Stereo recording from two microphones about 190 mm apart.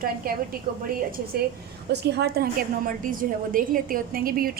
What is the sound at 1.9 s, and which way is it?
A woman's voice, 60° right (ahead or behind).